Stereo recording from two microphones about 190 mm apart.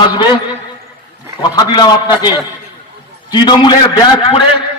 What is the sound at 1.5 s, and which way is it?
A man's voice, 20° left (ahead or behind).